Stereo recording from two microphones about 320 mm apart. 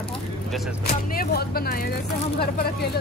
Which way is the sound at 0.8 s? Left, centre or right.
Left.